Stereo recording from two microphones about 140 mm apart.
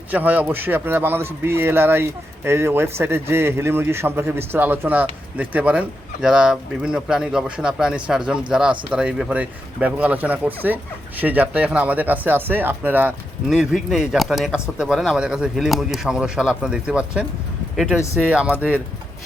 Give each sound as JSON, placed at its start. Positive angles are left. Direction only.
{"t": 0.1, "sound": "a man's voice", "side_deg": -10}
{"t": 13.5, "sound": "a man's voice", "side_deg": -5}